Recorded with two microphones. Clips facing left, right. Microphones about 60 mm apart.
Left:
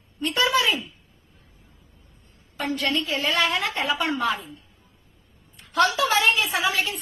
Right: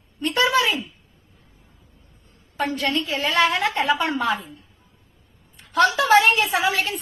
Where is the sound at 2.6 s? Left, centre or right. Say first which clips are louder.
Right 2 dB; right.